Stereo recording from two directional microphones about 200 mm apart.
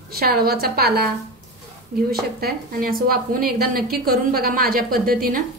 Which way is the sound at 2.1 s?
50° right (ahead or behind).